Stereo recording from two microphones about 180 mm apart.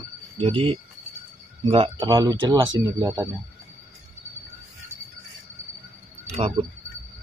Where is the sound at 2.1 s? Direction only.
20° right (ahead or behind).